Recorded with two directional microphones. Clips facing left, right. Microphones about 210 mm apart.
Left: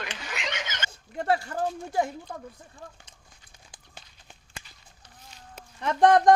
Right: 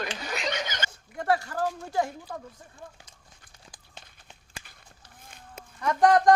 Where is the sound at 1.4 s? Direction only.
25° left (ahead or behind).